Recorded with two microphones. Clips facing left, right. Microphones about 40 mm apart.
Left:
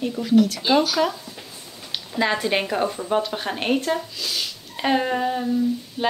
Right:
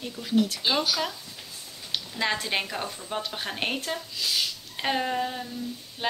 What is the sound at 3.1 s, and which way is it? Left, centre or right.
Speech, centre.